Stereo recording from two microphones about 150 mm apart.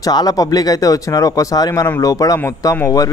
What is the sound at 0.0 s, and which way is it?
Speech, 25° left (ahead or behind).